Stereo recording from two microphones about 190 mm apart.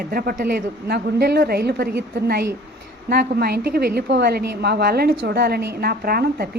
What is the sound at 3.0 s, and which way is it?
A woman's voice, 55° right (ahead or behind).